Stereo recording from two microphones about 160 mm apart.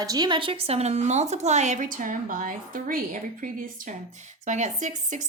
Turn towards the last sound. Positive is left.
turn(degrees=-50)  # may be behind; listen again after turning